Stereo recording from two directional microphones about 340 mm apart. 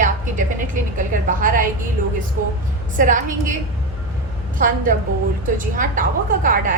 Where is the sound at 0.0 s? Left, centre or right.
Right.